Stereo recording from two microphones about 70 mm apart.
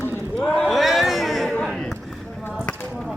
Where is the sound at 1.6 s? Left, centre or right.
Centre.